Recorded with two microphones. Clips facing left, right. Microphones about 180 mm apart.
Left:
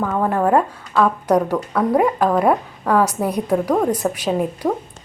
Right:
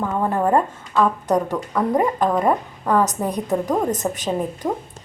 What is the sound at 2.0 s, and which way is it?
A woman's voice, 5° left (ahead or behind).